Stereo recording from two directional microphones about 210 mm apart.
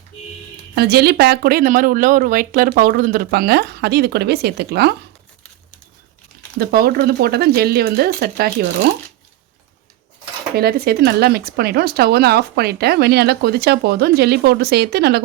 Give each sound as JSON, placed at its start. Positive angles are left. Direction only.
{"t": 0.8, "sound": "speech", "side_deg": -50}
{"t": 6.6, "sound": "speech", "side_deg": -45}
{"t": 10.5, "sound": "speech", "side_deg": -45}